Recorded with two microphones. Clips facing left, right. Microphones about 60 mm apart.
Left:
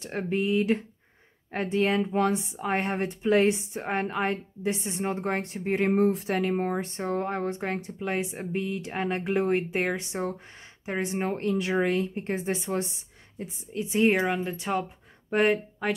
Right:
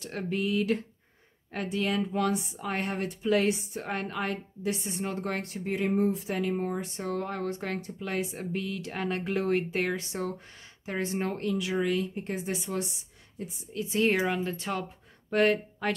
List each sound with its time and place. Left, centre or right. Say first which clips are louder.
0.0 s speech: left 3 dB; left
5.8 s speech: left 4 dB; left
6.0 s a sound: left 4 dB; left
6.4 s speech: left 3 dB; left
11.3 s speech: left 3 dB; left
14.1 s speech: left 2 dB; centre